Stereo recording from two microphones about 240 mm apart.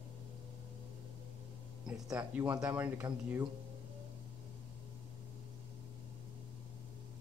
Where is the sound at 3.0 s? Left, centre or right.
Centre.